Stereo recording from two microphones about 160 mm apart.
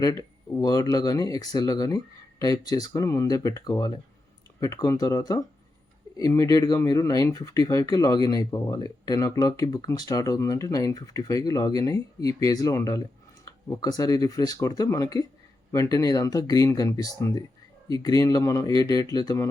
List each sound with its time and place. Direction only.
0.0 s speech: 20° left (ahead or behind)